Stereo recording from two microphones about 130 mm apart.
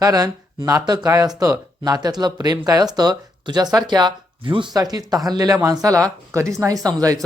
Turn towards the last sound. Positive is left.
turn(degrees=-25)  # may be behind; listen again after turning